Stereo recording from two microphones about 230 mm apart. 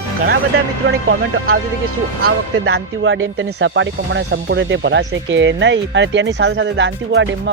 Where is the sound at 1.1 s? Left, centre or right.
Right.